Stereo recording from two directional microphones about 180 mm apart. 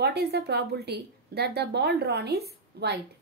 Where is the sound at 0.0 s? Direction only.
65° right (ahead or behind).